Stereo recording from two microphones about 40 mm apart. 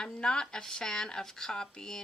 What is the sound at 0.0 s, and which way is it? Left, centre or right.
Speech, left.